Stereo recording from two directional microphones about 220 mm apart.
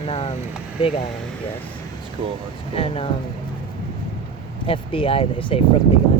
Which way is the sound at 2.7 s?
25° left (ahead or behind).